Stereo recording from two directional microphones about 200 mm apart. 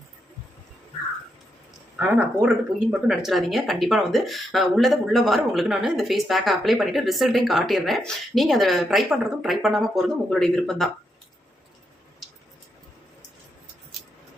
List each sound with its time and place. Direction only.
2.0 s speech: 5° right (ahead or behind)